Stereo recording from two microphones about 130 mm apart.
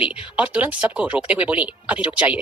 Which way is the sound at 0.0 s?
10° right (ahead or behind).